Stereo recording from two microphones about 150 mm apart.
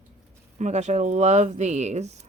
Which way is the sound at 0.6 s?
50° right (ahead or behind).